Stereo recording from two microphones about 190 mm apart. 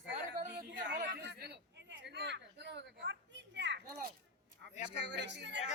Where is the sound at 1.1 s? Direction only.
65° right (ahead or behind).